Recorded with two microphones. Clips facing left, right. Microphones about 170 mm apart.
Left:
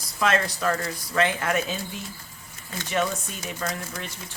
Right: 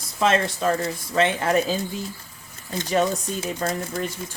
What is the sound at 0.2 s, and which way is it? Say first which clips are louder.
Speech: right 3 dB; 25° right (ahead or behind).